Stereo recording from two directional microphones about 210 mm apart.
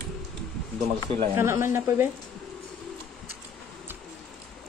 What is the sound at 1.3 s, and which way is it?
Speech, 10° right (ahead or behind).